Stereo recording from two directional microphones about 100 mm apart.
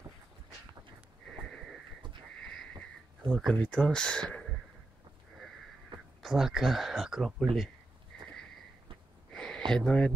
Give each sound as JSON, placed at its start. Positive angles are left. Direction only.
{"t": 2.4, "sound": "wheeze", "side_deg": 5}
{"t": 3.3, "sound": "speech", "side_deg": 0}
{"t": 5.9, "sound": "a sound", "side_deg": -50}
{"t": 6.2, "sound": "speech", "side_deg": -5}
{"t": 8.1, "sound": "sniff", "side_deg": 5}
{"t": 9.3, "sound": "a sound", "side_deg": 10}
{"t": 9.7, "sound": "speech", "side_deg": 5}